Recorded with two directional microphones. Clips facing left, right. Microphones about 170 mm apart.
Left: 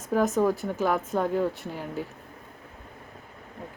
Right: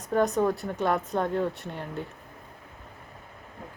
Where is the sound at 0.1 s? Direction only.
Centre (ahead or behind).